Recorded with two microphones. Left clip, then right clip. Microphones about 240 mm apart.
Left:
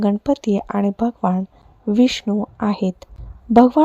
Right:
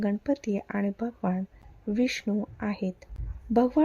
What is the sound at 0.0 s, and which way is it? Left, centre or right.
Speech, left.